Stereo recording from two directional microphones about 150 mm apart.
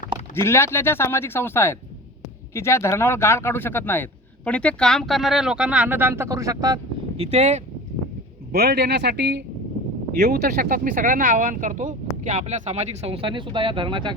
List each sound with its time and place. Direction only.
0.3 s speech: 15° left (ahead or behind); by 6.7 s 25° right (ahead or behind)
7.2 s speech: 45° right (ahead or behind)
8.5 s speech: 90° right; by 14.2 s 30° right (ahead or behind)